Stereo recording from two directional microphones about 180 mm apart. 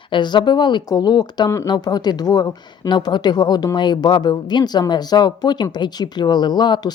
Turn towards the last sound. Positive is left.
turn(degrees=25)  # may be behind; listen again after turning